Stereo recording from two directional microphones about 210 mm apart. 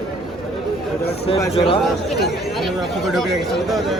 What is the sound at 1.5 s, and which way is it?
Speech, 25° left (ahead or behind).